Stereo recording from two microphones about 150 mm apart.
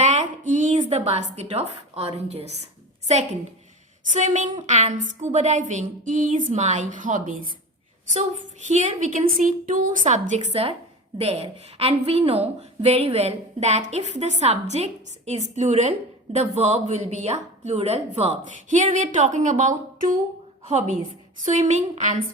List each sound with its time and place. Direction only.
0.0 s a woman's voice: 55° right (ahead or behind)
4.0 s a woman's voice: 55° right (ahead or behind)
21.4 s a woman's voice: 50° right (ahead or behind)